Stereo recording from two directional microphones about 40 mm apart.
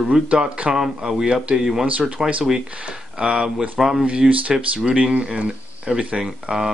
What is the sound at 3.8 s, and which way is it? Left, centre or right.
Speech, centre.